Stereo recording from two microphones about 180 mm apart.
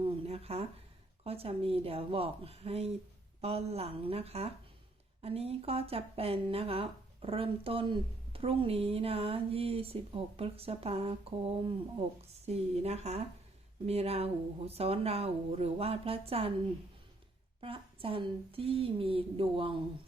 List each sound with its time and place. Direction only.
0.0 s a sound: 35° right (ahead or behind)
1.2 s speech: 35° right (ahead or behind)
17.6 s speech: 30° right (ahead or behind)